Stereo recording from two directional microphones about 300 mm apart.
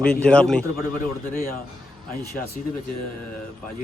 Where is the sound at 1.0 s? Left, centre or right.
Left.